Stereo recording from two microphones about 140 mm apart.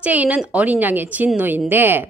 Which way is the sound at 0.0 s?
10° right (ahead or behind).